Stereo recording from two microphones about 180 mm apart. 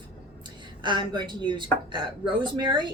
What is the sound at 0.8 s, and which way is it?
Speech, 25° right (ahead or behind).